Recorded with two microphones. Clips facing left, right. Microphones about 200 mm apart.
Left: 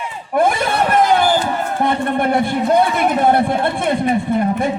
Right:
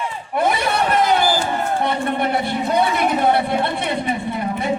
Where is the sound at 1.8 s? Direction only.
50° left (ahead or behind).